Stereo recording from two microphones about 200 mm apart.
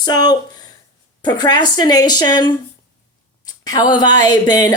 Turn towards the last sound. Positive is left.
turn(degrees=20)  # may be behind; listen again after turning